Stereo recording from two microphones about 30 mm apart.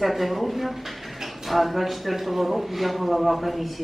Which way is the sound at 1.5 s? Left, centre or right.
Centre.